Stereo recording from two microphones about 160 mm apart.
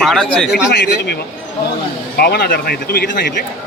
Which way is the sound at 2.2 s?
85° left.